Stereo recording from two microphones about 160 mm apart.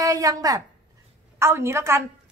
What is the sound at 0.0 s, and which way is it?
A woman's voice, 20° right (ahead or behind).